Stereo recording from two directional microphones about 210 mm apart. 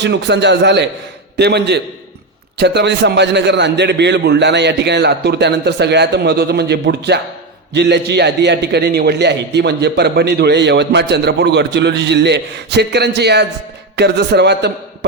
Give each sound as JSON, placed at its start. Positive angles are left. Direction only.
{"t": 0.0, "sound": "a man's voice", "side_deg": -55}